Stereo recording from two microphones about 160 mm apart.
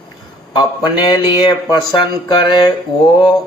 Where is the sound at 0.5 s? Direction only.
25° left (ahead or behind).